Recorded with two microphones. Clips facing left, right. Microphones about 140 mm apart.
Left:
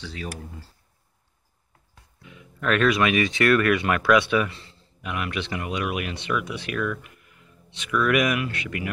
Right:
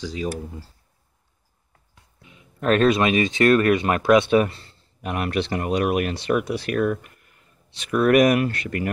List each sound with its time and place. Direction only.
0.0 s speech: 15° right (ahead or behind)
2.2 s speech: 30° right (ahead or behind)
4.3 s speech: 40° right (ahead or behind)